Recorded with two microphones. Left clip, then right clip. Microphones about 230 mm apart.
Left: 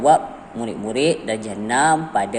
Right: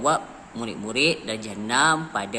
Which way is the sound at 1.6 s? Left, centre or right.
Right.